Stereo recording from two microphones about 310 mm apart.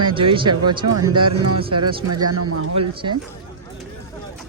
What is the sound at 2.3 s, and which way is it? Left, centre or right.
Speech, right.